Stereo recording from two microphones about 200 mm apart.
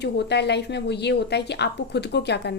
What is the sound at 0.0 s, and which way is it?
A woman's voice, 55° left (ahead or behind).